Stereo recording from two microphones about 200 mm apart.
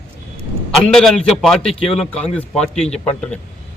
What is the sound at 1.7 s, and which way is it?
Speech, 30° left (ahead or behind).